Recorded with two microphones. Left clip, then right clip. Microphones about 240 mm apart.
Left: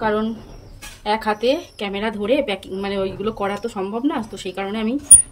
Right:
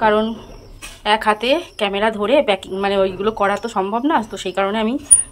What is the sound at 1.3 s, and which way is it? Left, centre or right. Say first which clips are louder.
Speech: right 2 dB; centre.